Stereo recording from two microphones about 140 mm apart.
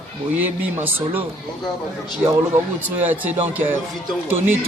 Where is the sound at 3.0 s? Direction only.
15° right (ahead or behind).